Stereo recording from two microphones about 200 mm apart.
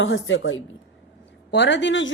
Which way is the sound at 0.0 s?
70° left (ahead or behind).